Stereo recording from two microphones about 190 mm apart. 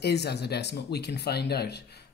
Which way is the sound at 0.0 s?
60° left (ahead or behind).